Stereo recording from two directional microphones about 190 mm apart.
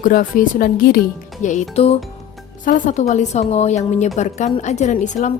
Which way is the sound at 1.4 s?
40° left (ahead or behind).